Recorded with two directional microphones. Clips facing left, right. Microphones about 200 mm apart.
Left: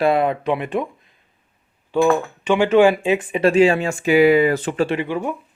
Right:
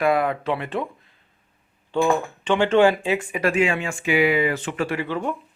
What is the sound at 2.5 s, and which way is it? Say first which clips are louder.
Speech: left 3 dB; 10° left (ahead or behind).